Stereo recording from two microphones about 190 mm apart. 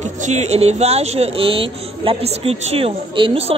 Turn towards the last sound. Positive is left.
turn(degrees=-30)  # may be behind; listen again after turning